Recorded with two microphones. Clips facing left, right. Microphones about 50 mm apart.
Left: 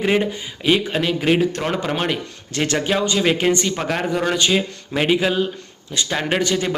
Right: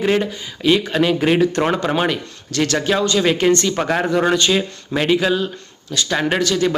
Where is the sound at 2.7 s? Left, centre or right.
Centre.